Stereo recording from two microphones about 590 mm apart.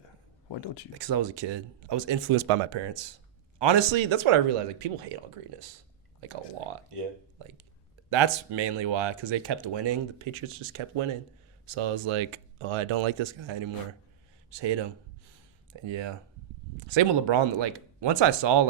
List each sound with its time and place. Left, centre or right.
0.4 s speech: left
0.9 s speech: right
6.9 s speech: right